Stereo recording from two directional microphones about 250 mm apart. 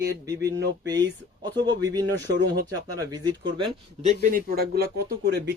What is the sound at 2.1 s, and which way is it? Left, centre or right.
Speech, right.